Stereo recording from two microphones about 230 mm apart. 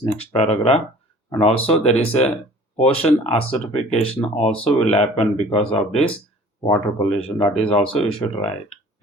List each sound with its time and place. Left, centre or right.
0.0 s speech: left